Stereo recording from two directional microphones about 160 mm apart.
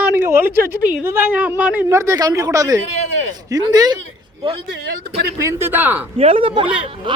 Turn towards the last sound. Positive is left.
turn(degrees=-35)  # may be behind; listen again after turning